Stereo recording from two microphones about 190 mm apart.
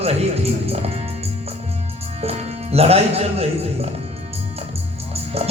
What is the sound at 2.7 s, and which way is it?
Music, 35° right (ahead or behind).